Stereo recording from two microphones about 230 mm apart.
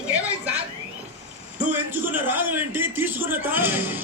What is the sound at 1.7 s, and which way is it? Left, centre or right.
A man's voice, centre.